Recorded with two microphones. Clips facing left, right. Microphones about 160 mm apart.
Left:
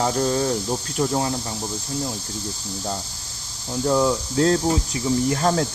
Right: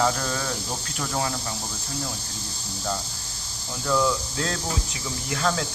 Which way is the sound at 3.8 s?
35° left (ahead or behind).